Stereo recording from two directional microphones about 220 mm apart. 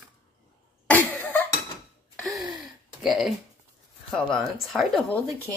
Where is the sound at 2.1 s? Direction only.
Centre (ahead or behind).